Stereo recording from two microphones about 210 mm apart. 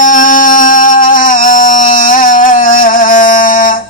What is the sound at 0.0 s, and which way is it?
Music, 40° left (ahead or behind).